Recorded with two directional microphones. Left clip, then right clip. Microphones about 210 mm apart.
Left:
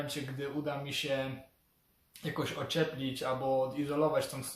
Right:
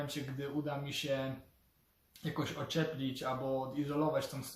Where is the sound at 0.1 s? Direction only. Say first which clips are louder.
Left 2 dB; centre (ahead or behind).